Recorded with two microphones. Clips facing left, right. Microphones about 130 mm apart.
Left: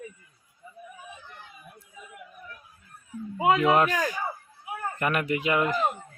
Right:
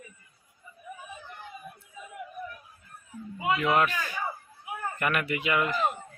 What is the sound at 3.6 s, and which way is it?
Speech, 35° left (ahead or behind).